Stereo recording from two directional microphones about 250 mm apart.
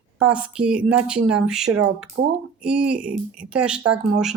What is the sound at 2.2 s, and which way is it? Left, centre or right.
Speech, right.